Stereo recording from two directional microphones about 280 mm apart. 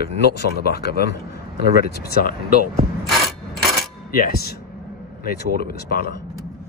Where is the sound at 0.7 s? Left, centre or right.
Left.